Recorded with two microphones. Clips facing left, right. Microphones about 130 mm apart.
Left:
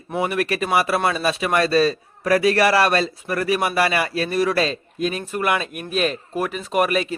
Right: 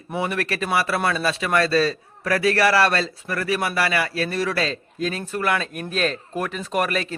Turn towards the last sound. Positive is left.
turn(degrees=10)  # may be behind; listen again after turning